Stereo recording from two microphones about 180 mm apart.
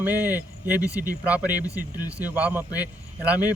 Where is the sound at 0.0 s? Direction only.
10° right (ahead or behind).